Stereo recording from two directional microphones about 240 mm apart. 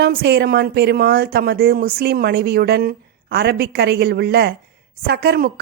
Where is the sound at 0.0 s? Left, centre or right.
Right.